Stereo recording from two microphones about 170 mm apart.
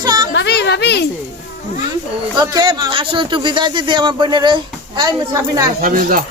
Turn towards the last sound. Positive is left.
turn(degrees=-55)  # may be behind; listen again after turning